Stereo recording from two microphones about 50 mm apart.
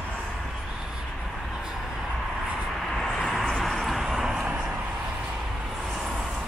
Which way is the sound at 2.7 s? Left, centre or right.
Centre.